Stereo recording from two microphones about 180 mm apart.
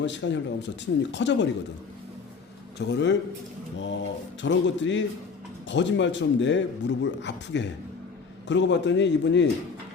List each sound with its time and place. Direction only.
0.0 s mantra: 90° left
1.1 s a man's voice: 75° left (ahead or behind)
2.7 s a man's voice: 70° left (ahead or behind)
3.8 s mantra: 90° left
5.6 s a man's voice: 90° left